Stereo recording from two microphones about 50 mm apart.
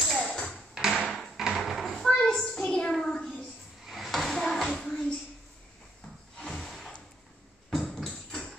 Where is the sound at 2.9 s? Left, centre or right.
Centre.